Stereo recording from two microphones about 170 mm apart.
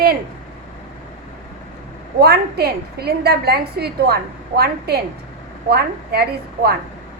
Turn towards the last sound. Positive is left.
turn(degrees=-70)  # may be behind; listen again after turning